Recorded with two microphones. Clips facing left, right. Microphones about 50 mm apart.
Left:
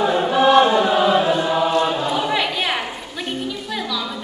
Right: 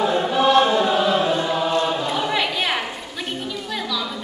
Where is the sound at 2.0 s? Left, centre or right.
Centre.